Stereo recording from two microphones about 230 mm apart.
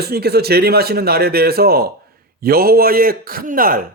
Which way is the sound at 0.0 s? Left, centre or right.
Right.